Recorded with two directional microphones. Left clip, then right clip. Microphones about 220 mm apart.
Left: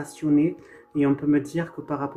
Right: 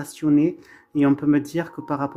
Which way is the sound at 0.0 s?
40° right (ahead or behind).